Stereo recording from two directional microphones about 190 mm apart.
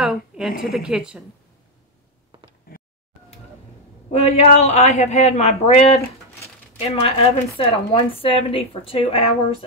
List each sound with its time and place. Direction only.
0.0 s a woman's voice: 5° right (ahead or behind)
2.3 s a sound: 25° right (ahead or behind)
4.1 s a woman's voice: 35° left (ahead or behind)
7.0 s a woman's voice: 30° left (ahead or behind)